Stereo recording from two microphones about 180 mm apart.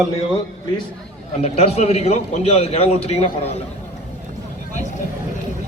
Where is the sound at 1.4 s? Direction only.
35° left (ahead or behind).